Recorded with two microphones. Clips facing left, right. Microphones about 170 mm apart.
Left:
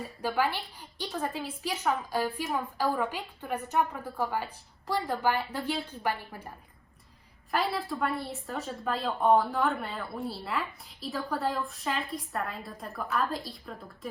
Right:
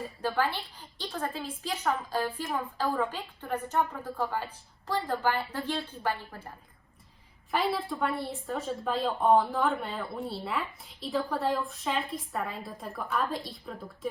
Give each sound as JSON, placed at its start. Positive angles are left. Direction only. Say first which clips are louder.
{"t": 0.2, "sound": "a woman's voice", "louder": "left 1 dB", "side_deg": 10}
{"t": 7.5, "sound": "a woman's voice", "louder": "right 1 dB", "side_deg": 0}